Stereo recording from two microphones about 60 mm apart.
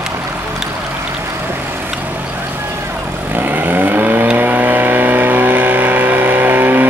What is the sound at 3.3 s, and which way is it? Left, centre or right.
Vehicle, right.